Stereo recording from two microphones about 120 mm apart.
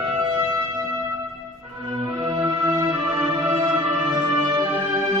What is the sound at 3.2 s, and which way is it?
Music, 25° right (ahead or behind).